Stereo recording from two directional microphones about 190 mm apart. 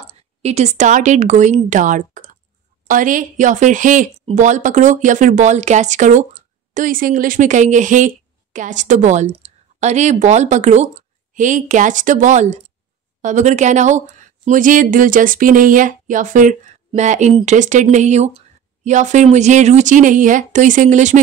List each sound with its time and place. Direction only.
0.4 s speech: 35° right (ahead or behind)
17.3 s speech: 25° right (ahead or behind)
17.6 s speech: 40° right (ahead or behind)